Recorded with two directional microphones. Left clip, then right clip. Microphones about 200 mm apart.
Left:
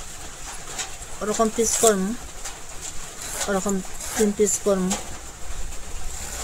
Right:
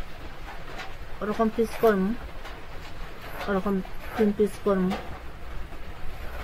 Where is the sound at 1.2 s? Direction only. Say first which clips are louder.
Left 4 dB; 20° left (ahead or behind).